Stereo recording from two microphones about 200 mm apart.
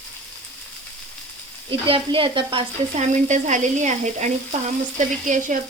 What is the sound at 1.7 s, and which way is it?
Speech, 25° right (ahead or behind).